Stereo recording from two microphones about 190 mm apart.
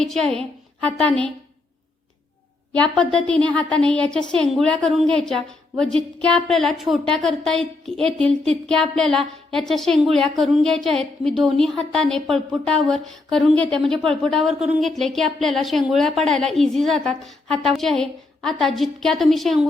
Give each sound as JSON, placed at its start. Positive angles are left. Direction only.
{"t": 0.0, "sound": "speech", "side_deg": 0}
{"t": 2.7, "sound": "speech", "side_deg": 5}